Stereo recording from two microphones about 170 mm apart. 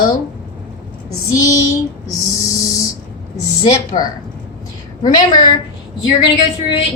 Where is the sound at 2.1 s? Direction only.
20° left (ahead or behind).